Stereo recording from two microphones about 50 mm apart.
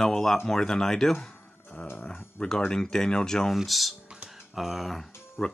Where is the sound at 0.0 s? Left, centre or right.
Centre.